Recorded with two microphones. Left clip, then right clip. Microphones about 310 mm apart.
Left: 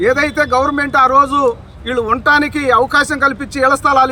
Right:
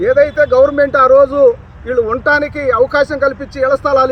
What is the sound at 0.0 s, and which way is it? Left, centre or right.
A man's voice, left.